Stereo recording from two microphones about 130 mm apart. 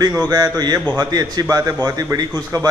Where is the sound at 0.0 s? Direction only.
30° right (ahead or behind).